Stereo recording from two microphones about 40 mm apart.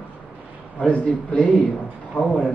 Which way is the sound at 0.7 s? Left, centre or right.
Left.